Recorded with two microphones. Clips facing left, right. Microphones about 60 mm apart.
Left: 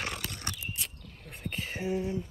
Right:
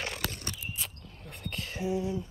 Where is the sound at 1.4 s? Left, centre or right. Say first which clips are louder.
Left 2 dB; left.